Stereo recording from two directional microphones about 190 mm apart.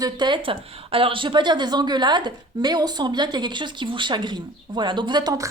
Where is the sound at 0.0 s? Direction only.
25° right (ahead or behind).